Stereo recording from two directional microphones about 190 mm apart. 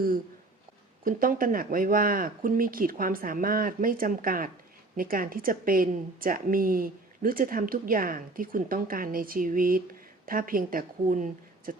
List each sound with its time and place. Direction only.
1.0 s a woman's voice: 45° right (ahead or behind)